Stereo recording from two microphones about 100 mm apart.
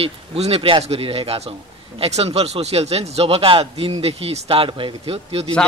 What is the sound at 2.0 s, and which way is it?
Speech, 90° right.